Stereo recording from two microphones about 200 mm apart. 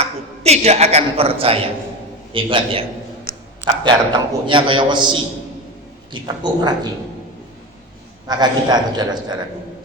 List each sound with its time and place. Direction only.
0.0 s a woman's voice: 30° right (ahead or behind)
3.8 s a man's voice: 25° right (ahead or behind)
8.3 s a man's voice: 20° right (ahead or behind)